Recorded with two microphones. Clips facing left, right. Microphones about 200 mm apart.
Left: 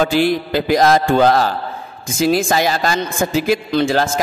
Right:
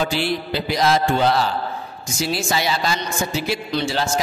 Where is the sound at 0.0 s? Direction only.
50° left (ahead or behind).